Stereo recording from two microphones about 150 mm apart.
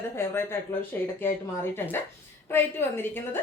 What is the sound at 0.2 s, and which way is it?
A woman's voice, 15° left (ahead or behind).